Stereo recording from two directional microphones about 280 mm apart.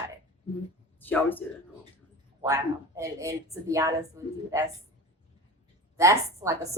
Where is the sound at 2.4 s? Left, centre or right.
Centre.